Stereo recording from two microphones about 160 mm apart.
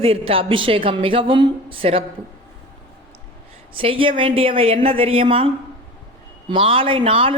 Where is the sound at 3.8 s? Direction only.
35° right (ahead or behind).